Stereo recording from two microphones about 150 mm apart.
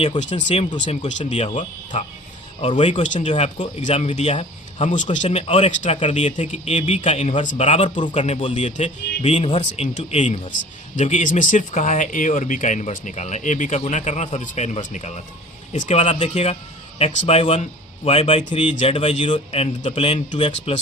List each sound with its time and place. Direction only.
0.2 s speech: 50° left (ahead or behind)
1.5 s speech: 55° left (ahead or behind)
7.9 s speech: 35° left (ahead or behind)